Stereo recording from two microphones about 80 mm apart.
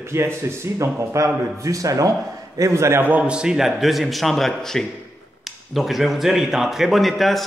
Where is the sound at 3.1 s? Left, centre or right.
Centre.